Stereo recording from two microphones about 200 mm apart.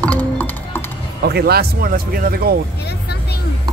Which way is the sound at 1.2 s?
50° right (ahead or behind).